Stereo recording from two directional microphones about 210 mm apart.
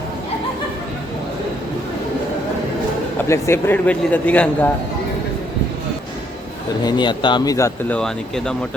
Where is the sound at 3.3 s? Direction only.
10° left (ahead or behind).